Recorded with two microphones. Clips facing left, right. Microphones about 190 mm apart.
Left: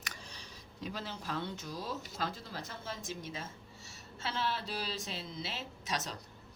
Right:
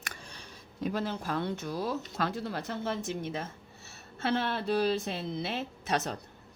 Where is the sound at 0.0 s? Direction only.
55° right (ahead or behind).